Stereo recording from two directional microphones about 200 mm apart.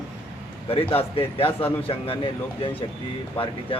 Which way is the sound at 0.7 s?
30° left (ahead or behind).